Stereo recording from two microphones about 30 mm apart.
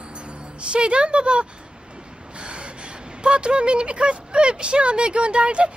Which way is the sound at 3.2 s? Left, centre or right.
Right.